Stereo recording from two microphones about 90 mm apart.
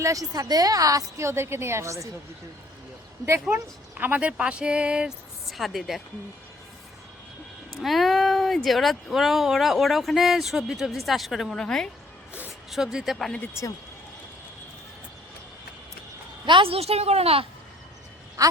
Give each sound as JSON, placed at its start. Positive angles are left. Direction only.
{"t": 0.0, "sound": "a woman's voice", "side_deg": -40}
{"t": 3.5, "sound": "speech", "side_deg": -20}
{"t": 7.8, "sound": "speech", "side_deg": 0}
{"t": 12.7, "sound": "speech", "side_deg": -5}
{"t": 13.5, "sound": "speech", "side_deg": 35}
{"t": 16.5, "sound": "a woman's voice", "side_deg": -80}
{"t": 18.4, "sound": "a woman's voice", "side_deg": -40}